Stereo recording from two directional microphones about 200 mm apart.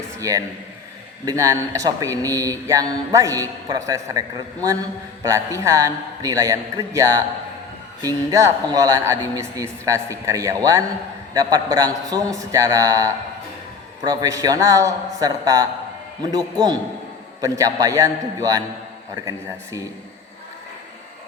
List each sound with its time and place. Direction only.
0.2 s a woman's voice: 15° right (ahead or behind)
5.2 s a woman's voice: 15° right (ahead or behind)